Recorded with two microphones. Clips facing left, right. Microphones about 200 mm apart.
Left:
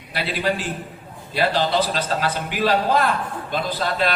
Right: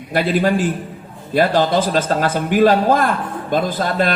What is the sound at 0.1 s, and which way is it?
A man's voice, 50° right (ahead or behind).